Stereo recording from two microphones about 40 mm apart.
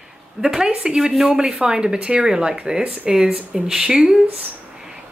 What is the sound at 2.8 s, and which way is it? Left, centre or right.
Speech, right.